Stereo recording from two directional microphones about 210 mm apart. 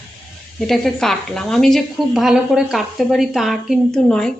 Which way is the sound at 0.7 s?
Centre (ahead or behind).